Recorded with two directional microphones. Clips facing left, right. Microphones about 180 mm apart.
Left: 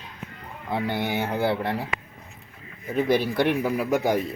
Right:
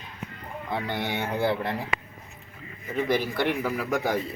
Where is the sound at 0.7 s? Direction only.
10° left (ahead or behind).